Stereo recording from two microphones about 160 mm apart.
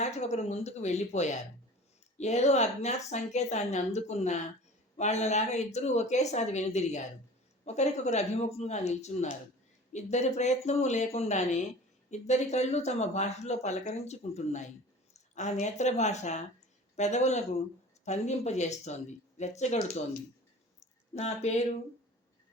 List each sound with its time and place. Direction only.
0.0 s speech: 45° left (ahead or behind)
21.2 s speech: 45° left (ahead or behind)